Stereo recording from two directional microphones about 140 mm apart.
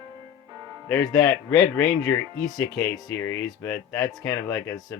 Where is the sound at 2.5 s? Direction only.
5° left (ahead or behind).